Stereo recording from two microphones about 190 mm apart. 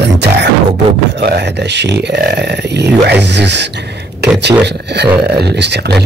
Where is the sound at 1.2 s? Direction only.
60° right (ahead or behind).